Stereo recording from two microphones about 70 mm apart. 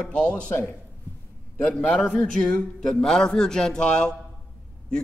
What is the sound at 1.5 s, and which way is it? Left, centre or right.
A man's voice, left.